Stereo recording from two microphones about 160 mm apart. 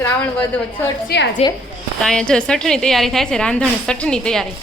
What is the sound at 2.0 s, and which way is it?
A woman's voice, 5° left (ahead or behind).